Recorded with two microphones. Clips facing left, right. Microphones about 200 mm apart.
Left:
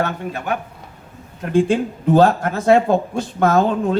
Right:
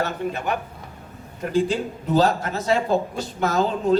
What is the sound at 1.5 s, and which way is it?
Speech, 55° left (ahead or behind).